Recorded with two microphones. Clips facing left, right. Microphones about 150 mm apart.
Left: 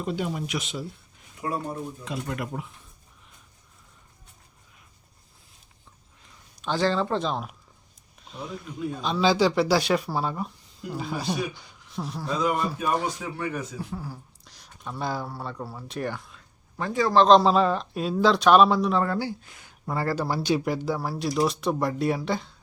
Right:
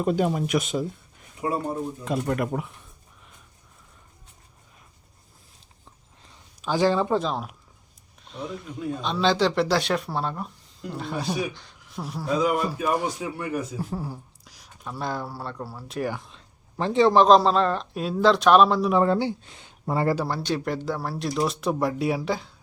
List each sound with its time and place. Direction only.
0.0 s speech: 50° right (ahead or behind)
1.4 s speech: 30° right (ahead or behind)
2.0 s speech: 45° right (ahead or behind)
2.5 s speech: 65° right (ahead or behind)
6.6 s speech: 10° right (ahead or behind)
7.2 s a man's voice: centre (ahead or behind)
13.7 s speech: 40° right (ahead or behind)
14.4 s speech: 5° right (ahead or behind)
16.7 s a man's voice: 25° right (ahead or behind)
17.2 s a man's voice: 5° right (ahead or behind)
19.0 s speech: 25° right (ahead or behind)
20.1 s a man's voice: 5° left (ahead or behind)